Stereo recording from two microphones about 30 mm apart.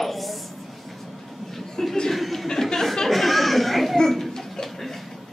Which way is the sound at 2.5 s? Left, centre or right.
Centre.